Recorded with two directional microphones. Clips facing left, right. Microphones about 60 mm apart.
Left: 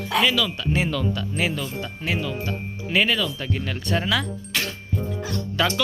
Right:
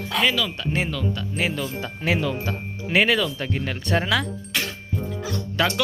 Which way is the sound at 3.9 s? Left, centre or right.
Right.